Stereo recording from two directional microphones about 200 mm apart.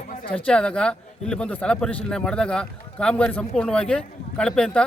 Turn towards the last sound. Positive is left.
turn(degrees=5)  # may be behind; listen again after turning